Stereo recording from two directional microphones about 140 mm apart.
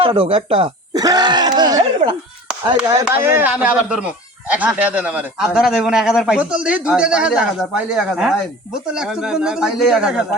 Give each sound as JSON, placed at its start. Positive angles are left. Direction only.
{"t": 0.0, "sound": "speech", "side_deg": -40}
{"t": 0.9, "sound": "groan", "side_deg": -30}
{"t": 3.0, "sound": "speech", "side_deg": -15}